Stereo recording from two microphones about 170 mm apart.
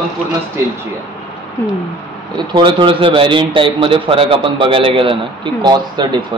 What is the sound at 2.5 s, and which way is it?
A man's voice, 25° right (ahead or behind).